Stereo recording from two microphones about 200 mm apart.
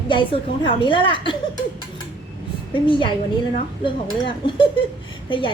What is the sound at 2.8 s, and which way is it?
Speech, 25° left (ahead or behind).